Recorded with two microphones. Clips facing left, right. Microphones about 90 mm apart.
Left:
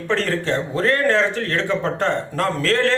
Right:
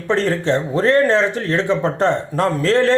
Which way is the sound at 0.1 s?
20° right (ahead or behind).